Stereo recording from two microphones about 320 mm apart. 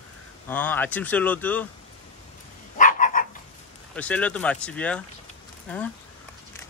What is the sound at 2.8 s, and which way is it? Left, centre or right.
Dog, left.